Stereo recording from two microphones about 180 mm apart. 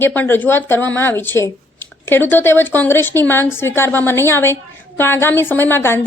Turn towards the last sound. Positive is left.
turn(degrees=15)  # may be behind; listen again after turning